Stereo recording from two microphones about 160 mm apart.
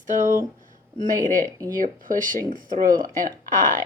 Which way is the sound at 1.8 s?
55° right (ahead or behind).